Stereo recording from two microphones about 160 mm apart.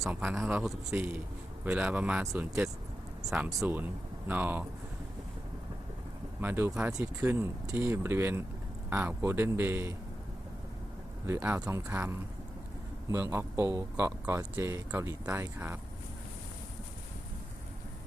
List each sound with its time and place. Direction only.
0.0 s speech: 5° right (ahead or behind)
6.4 s speech: 15° right (ahead or behind)
11.3 s speech: 10° right (ahead or behind)
13.3 s speech: 15° right (ahead or behind)